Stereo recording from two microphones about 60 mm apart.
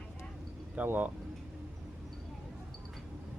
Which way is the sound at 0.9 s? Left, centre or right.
Right.